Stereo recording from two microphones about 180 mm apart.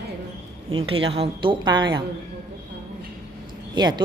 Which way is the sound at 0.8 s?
30° right (ahead or behind).